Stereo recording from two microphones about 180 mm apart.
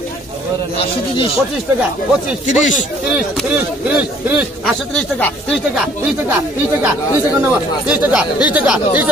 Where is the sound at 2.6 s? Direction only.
45° left (ahead or behind).